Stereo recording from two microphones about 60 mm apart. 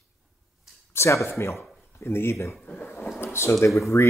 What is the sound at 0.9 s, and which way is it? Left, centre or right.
Speech, left.